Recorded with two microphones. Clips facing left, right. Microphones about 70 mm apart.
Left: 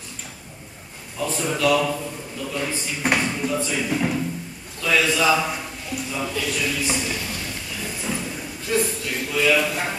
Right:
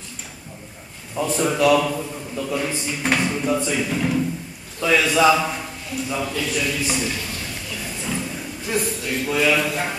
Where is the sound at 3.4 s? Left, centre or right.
Centre.